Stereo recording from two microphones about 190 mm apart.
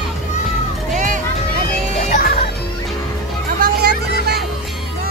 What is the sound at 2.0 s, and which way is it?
Music, 40° left (ahead or behind).